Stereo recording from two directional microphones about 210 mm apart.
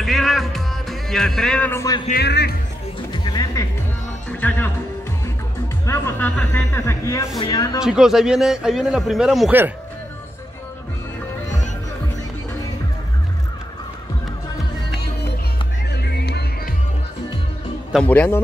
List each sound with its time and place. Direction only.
0.0 s music: centre (ahead or behind); by 2.0 s 15° left (ahead or behind)
2.0 s speech: 50° left (ahead or behind)
3.1 s music: 20° left (ahead or behind)
4.3 s speech: 5° left (ahead or behind)
5.9 s a man's voice: 10° left (ahead or behind)
7.8 s a man's voice: 5° right (ahead or behind)
15.9 s music: 50° left (ahead or behind)
17.9 s a man's voice: 5° left (ahead or behind)